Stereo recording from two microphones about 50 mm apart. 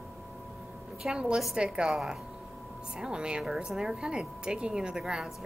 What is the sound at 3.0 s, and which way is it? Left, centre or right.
Speech, centre.